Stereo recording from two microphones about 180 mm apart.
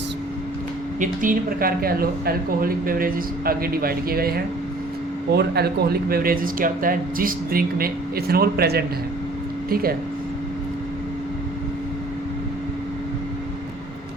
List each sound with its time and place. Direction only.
0.9 s speech: 45° right (ahead or behind)